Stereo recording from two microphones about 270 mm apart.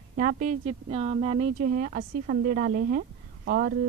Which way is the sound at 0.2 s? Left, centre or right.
Right.